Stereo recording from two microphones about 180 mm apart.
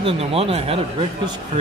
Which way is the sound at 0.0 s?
30° right (ahead or behind).